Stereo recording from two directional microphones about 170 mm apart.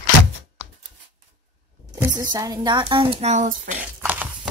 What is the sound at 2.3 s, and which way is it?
Speech, 25° right (ahead or behind).